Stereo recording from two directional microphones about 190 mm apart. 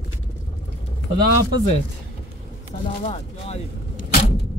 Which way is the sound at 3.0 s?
35° left (ahead or behind).